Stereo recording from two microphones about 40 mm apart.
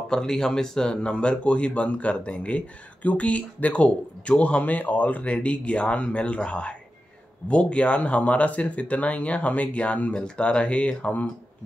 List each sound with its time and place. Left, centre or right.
0.1 s speech: centre; by 10.2 s left
10.2 s speech: left